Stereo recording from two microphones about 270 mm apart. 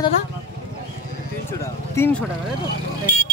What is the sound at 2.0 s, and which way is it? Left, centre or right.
Speech, centre.